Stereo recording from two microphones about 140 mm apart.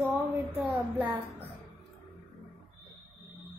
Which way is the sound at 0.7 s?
10° right (ahead or behind).